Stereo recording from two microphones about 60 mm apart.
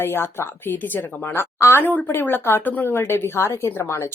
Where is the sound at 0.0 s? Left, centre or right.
Left.